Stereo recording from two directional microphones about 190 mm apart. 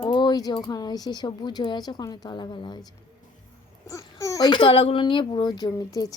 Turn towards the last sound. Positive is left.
turn(degrees=20)  # may be behind; listen again after turning